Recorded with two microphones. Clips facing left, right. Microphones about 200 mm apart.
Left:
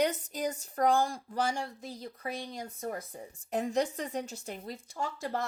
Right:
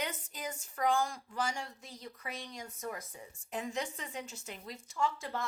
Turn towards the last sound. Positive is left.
turn(degrees=40)  # may be behind; listen again after turning